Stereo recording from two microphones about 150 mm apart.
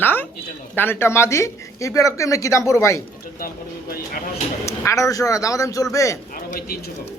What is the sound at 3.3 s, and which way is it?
Speech, 85° left.